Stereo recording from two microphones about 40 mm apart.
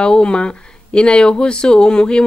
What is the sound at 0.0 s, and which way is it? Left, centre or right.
Speech, left.